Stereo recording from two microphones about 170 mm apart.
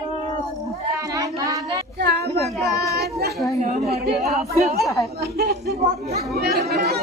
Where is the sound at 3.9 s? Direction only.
70° right (ahead or behind).